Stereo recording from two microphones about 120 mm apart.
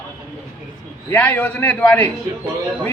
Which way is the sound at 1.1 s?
15° left (ahead or behind).